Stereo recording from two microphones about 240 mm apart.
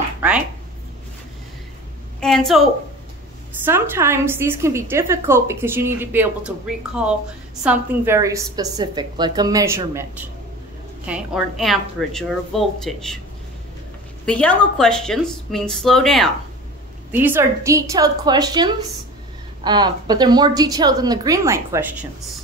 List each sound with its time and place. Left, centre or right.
2.1 s a sound: centre
3.6 s a woman's voice: centre
14.2 s a woman's voice: centre
17.1 s a woman's voice: centre